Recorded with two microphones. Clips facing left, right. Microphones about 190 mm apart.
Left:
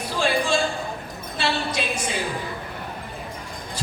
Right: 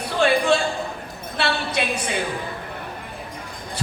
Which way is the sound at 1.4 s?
65° right (ahead or behind).